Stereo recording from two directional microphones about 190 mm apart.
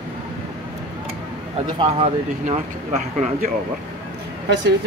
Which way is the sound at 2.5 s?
40° right (ahead or behind).